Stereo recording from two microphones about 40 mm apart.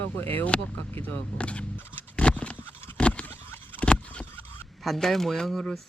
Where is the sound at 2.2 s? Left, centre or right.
Left.